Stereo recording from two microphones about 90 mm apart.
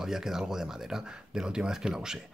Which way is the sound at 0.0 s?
5° right (ahead or behind).